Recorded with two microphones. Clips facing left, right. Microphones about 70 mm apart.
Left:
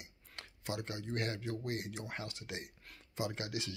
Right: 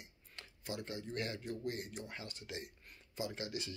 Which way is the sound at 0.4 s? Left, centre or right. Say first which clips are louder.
Left 3 dB; left.